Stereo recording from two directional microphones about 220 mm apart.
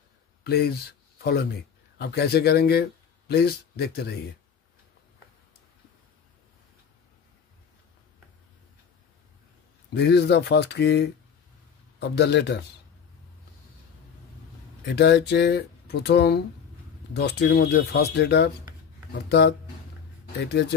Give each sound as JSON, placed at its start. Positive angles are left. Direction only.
{"t": 0.4, "sound": "speech", "side_deg": 45}
{"t": 9.9, "sound": "speech", "side_deg": 50}
{"t": 14.9, "sound": "speech", "side_deg": 50}